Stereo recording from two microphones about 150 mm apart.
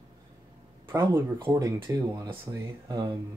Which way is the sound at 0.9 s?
20° right (ahead or behind).